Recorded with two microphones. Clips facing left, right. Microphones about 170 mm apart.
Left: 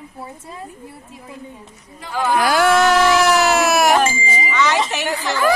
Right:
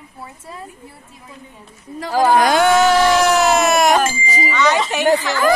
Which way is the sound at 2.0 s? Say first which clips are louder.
Right 5 dB; 40° right (ahead or behind).